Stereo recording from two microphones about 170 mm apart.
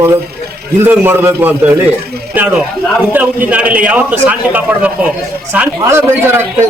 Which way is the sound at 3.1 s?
10° right (ahead or behind).